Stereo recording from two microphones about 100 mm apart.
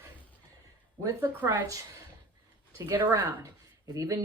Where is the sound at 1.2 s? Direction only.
20° right (ahead or behind).